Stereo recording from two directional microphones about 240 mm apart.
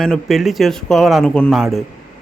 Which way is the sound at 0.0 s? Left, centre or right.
Centre.